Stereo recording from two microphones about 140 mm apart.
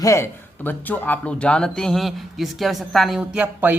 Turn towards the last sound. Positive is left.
turn(degrees=-10)  # may be behind; listen again after turning